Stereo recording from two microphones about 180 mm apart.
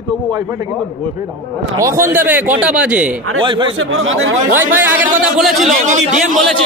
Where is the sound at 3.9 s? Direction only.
90° right.